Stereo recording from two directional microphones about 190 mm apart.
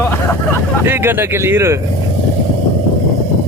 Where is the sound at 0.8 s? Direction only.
10° right (ahead or behind).